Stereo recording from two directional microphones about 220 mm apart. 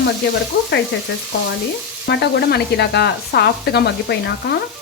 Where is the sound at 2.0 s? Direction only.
50° left (ahead or behind).